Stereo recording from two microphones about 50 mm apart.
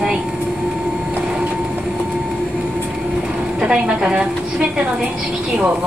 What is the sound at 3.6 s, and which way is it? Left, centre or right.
Speech, centre.